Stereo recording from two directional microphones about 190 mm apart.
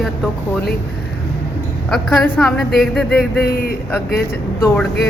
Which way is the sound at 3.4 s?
50° left (ahead or behind).